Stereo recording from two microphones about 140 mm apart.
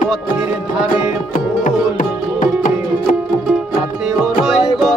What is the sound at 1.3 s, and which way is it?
Music, 70° left (ahead or behind).